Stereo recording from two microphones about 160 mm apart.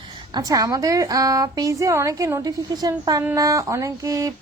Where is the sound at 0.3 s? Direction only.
20° right (ahead or behind).